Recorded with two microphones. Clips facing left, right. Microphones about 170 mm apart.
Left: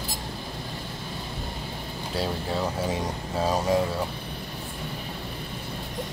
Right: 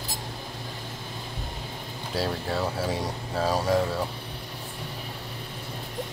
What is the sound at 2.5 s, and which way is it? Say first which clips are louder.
Speech: even; 15° left (ahead or behind).